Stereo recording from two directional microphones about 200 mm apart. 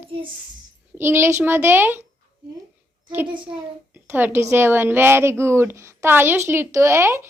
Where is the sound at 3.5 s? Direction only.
20° right (ahead or behind).